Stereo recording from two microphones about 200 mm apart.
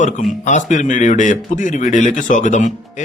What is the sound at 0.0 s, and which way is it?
Speech, 40° left (ahead or behind).